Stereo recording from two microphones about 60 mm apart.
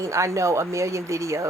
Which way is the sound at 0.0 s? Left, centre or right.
Right.